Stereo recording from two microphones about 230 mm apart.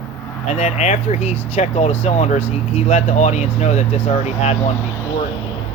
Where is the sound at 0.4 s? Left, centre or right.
Left.